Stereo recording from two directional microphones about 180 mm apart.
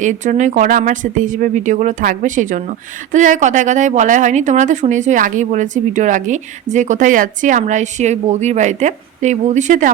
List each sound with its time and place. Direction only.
0.0 s speech: 45° right (ahead or behind)